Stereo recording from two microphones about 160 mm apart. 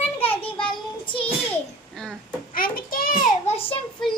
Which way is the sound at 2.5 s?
65° left (ahead or behind).